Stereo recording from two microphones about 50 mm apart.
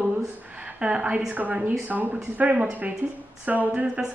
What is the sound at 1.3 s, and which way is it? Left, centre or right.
A woman's voice, right.